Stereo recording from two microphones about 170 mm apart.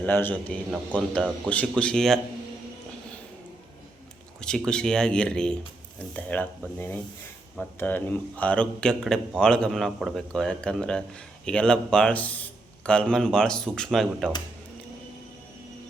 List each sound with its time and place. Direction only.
0.0 s a man's voice: 10° left (ahead or behind)
4.4 s a man's voice: 5° left (ahead or behind)